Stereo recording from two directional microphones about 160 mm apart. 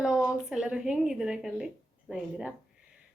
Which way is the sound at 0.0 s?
5° right (ahead or behind).